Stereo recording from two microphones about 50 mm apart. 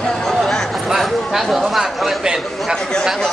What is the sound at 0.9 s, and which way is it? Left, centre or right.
A man's voice, centre.